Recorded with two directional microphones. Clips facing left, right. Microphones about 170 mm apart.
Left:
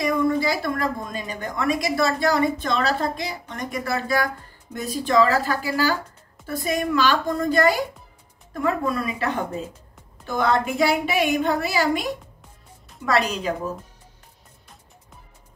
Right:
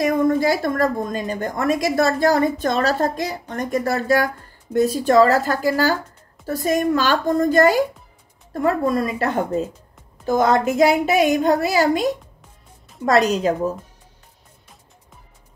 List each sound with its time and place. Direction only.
0.0 s a woman's voice: 45° right (ahead or behind)